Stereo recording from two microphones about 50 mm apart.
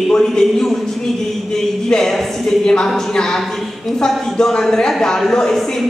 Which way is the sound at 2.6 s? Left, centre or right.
Centre.